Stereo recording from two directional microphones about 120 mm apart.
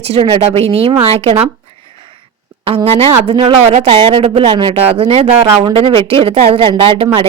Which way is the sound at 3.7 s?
60° right (ahead or behind).